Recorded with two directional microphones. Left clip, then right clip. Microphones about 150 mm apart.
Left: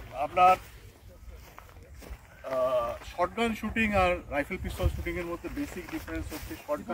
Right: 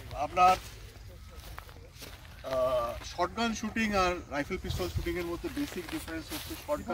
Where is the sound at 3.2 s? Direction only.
20° left (ahead or behind).